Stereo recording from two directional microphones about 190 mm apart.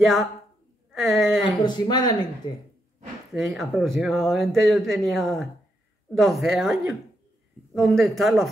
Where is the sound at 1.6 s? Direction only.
25° left (ahead or behind).